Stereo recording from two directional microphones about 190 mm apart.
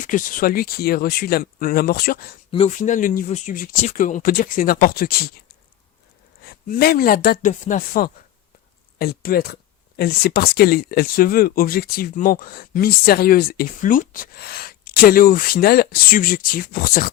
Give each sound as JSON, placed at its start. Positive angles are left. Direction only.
{"t": 0.0, "sound": "speech", "side_deg": 45}
{"t": 2.5, "sound": "speech", "side_deg": 35}
{"t": 6.4, "sound": "speech", "side_deg": 55}